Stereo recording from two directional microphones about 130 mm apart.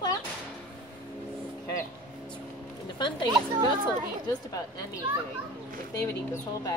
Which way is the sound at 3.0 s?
35° left (ahead or behind).